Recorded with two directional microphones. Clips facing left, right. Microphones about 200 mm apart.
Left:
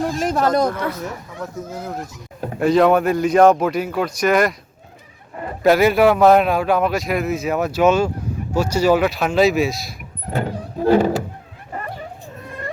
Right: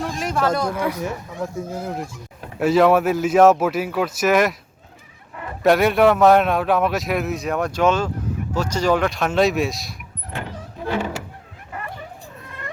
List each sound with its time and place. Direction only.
0.2 s speech: 35° left (ahead or behind)
0.7 s speech: 10° right (ahead or behind)
2.6 s a man's voice: 5° right (ahead or behind)
5.6 s a man's voice: centre (ahead or behind)
10.3 s vehicle: 40° left (ahead or behind)